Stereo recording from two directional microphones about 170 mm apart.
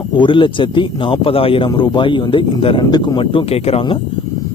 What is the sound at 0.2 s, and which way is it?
Speech, 30° left (ahead or behind).